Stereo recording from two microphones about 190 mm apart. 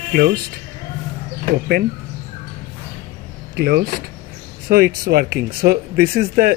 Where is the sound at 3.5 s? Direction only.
55° right (ahead or behind).